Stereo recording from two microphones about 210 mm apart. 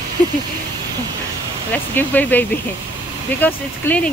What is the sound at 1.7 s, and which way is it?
Speech, 10° left (ahead or behind).